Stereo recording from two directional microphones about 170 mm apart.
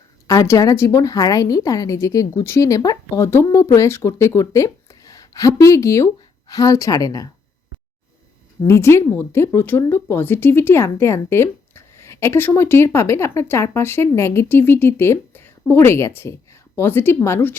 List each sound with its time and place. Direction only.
0.3 s a woman's voice: 20° left (ahead or behind)
8.6 s speech: 15° left (ahead or behind)